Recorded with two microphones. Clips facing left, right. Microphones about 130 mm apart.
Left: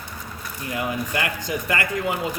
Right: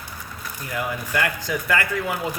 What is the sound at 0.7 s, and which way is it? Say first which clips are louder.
Speech: left 1 dB; 20° left (ahead or behind).